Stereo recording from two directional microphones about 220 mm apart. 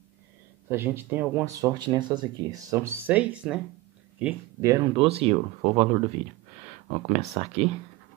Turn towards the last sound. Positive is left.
turn(degrees=-30)  # may be behind; listen again after turning